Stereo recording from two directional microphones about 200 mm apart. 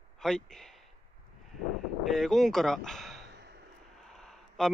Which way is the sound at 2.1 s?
Centre (ahead or behind).